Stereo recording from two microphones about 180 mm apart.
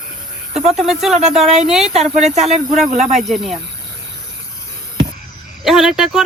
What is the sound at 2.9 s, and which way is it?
Speech, 45° right (ahead or behind).